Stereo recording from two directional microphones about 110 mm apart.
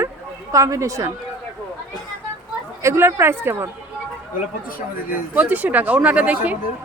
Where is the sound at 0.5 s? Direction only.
30° right (ahead or behind).